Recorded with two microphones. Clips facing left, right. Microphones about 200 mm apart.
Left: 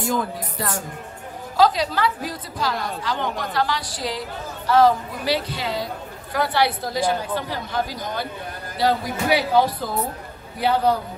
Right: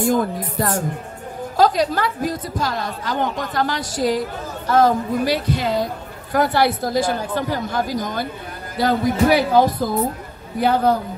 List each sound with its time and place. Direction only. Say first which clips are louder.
0.0 s a woman's voice: right 6 dB; 45° right (ahead or behind)